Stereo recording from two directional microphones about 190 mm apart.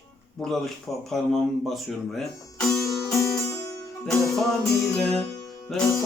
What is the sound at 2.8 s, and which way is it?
Music, 15° left (ahead or behind).